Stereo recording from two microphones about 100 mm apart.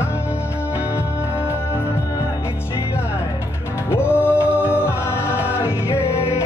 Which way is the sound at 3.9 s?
25° left (ahead or behind).